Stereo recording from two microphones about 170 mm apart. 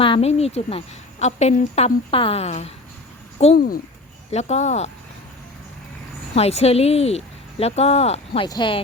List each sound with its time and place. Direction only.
0.0 s speech: 35° left (ahead or behind)
3.5 s speech: 60° left (ahead or behind)
4.3 s speech: 40° left (ahead or behind)
6.3 s speech: 40° left (ahead or behind)